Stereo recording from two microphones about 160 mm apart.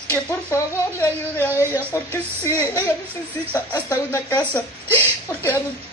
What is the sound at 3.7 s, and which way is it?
A woman's voice, 15° left (ahead or behind).